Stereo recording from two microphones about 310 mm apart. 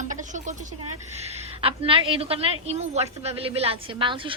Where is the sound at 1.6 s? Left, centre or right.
Centre.